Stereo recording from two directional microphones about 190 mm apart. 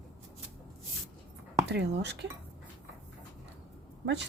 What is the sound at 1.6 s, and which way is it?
Speech, 65° right (ahead or behind).